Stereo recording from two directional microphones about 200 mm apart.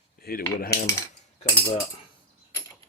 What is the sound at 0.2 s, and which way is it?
Cutlery, 50° left (ahead or behind).